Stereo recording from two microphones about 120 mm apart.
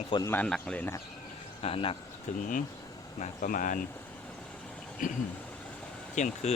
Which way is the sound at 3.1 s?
75° left (ahead or behind).